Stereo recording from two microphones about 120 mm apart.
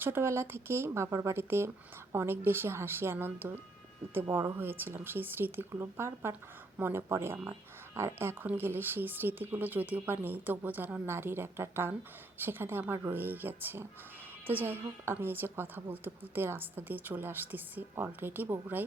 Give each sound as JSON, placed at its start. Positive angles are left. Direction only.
{"t": 0.0, "sound": "a woman's voice", "side_deg": -20}